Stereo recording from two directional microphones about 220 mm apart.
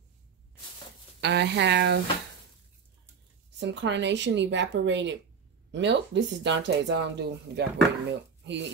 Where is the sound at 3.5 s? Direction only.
55° right (ahead or behind).